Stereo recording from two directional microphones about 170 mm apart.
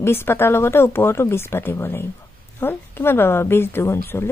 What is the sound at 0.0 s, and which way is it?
A woman's voice, 15° left (ahead or behind).